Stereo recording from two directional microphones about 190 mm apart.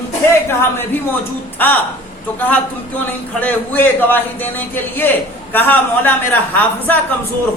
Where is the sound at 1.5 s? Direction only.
10° left (ahead or behind).